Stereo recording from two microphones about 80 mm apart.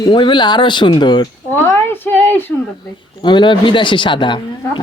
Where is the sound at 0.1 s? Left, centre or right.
Left.